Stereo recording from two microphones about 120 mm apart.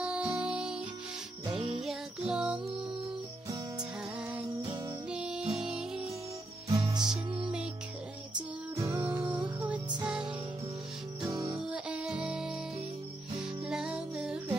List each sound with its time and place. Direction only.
0.0 s music: 10° right (ahead or behind)
1.8 s music: 5° right (ahead or behind)
4.2 s music: 10° right (ahead or behind)
6.7 s music: 40° right (ahead or behind)
7.4 s music: 5° right (ahead or behind)
8.7 s music: 25° right (ahead or behind)
9.2 s music: 10° right (ahead or behind)
11.3 s music: 35° right (ahead or behind)
11.6 s music: 10° right (ahead or behind)